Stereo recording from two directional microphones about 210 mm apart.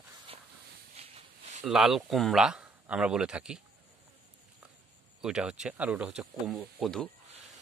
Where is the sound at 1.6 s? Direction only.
Centre (ahead or behind).